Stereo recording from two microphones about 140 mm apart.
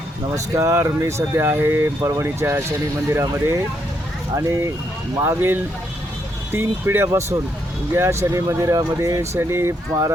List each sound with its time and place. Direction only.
0.3 s speech: 20° right (ahead or behind)
5.1 s speech: 20° right (ahead or behind)